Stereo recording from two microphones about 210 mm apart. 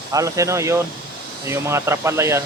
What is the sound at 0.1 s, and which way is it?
Speech, 15° right (ahead or behind).